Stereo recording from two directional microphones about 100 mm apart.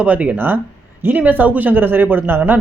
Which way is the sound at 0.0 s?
15° right (ahead or behind).